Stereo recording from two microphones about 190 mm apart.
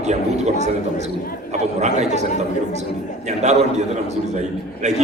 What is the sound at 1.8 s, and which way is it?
Speech, 35° right (ahead or behind).